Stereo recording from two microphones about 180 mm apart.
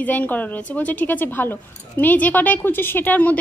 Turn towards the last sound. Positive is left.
turn(degrees=10)  # may be behind; listen again after turning